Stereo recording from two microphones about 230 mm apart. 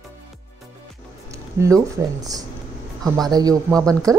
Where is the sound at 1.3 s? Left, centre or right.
Centre.